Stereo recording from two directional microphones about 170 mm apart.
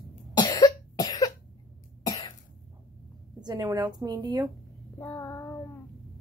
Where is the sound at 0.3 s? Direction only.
25° left (ahead or behind).